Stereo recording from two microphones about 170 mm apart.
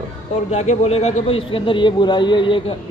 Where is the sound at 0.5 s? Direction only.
40° left (ahead or behind).